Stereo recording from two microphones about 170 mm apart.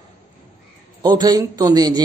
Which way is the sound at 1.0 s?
25° right (ahead or behind).